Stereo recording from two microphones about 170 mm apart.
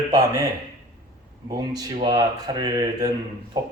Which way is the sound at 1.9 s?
25° right (ahead or behind).